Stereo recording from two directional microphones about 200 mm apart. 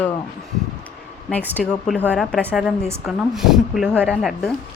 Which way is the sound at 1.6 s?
5° left (ahead or behind).